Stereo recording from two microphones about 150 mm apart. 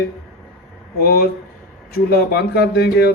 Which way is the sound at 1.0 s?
90° left.